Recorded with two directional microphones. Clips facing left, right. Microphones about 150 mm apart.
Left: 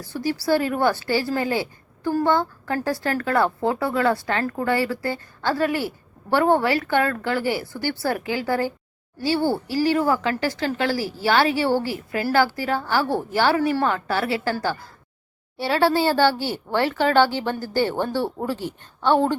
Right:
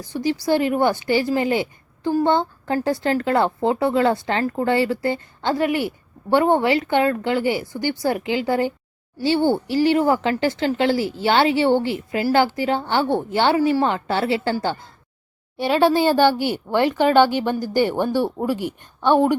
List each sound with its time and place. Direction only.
0.0 s a woman's voice: 20° right (ahead or behind)